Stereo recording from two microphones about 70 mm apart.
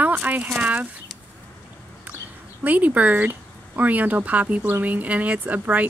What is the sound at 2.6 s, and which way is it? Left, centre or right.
Speech, right.